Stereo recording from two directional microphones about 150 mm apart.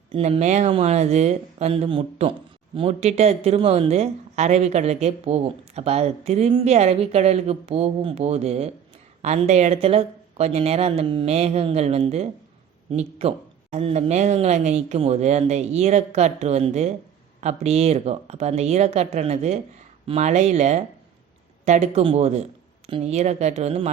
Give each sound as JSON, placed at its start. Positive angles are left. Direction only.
{"t": 0.1, "sound": "speech", "side_deg": -45}